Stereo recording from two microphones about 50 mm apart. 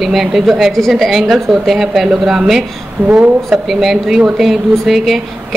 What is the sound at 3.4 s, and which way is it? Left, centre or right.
A woman's voice, centre.